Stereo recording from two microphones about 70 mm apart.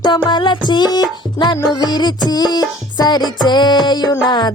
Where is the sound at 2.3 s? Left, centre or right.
Left.